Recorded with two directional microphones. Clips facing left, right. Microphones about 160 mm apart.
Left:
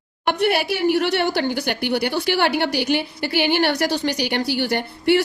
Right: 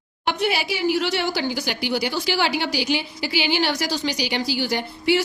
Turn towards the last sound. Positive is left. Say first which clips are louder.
# left 3 dB
turn(degrees=60)  # may be behind; listen again after turning